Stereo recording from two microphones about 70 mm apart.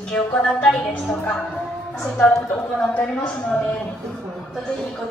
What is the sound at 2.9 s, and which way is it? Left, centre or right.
Speech, centre.